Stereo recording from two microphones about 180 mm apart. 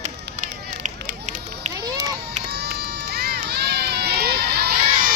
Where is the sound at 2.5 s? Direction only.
65° right (ahead or behind).